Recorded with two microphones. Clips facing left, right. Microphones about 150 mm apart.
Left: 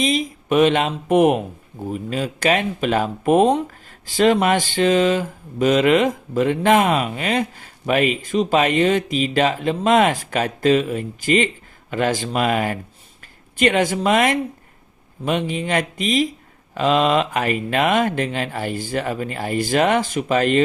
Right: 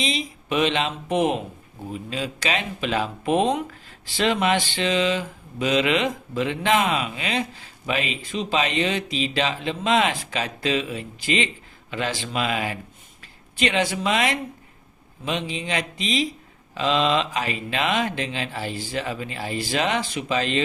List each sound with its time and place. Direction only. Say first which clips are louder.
0.0 s speech: left 7 dB; 45° left (ahead or behind)